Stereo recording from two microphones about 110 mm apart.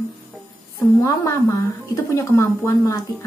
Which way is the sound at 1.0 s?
30° left (ahead or behind).